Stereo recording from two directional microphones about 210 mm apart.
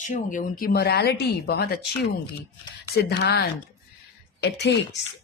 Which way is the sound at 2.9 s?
50° left (ahead or behind).